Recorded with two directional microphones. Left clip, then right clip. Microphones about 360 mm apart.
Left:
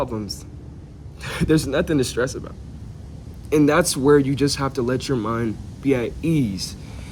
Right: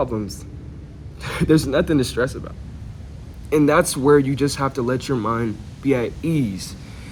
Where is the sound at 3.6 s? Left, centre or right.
Centre.